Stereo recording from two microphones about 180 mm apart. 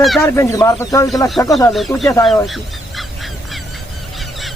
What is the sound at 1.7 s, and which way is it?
Speech, centre (ahead or behind).